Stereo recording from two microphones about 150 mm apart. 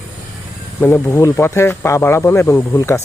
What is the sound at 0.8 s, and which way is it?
Speech, 15° left (ahead or behind).